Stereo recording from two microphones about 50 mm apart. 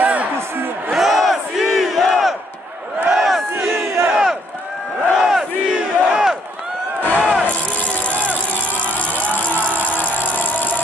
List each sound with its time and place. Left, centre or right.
0.0 s a sound: right
0.9 s crowd: centre
3.1 s battle cry: centre
3.7 s battle cry: right
4.1 s battle cry: centre
6.0 s crowd: centre
7.2 s a sound: right
8.1 s a sound: left
8.8 s vehicle: left